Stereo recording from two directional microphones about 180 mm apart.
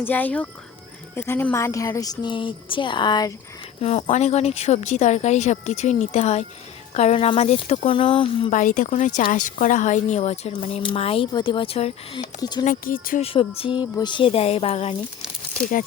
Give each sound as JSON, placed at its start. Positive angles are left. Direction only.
{"t": 0.0, "sound": "speech", "side_deg": 10}
{"t": 3.8, "sound": "a woman's voice", "side_deg": 35}
{"t": 8.4, "sound": "a woman's voice", "side_deg": 45}
{"t": 12.6, "sound": "speech", "side_deg": 50}
{"t": 13.2, "sound": "a woman's voice", "side_deg": 30}